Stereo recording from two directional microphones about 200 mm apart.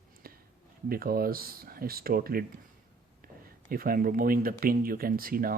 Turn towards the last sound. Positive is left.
turn(degrees=-45)  # may be behind; listen again after turning